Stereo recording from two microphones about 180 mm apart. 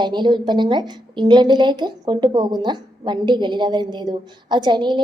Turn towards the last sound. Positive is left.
turn(degrees=-25)  # may be behind; listen again after turning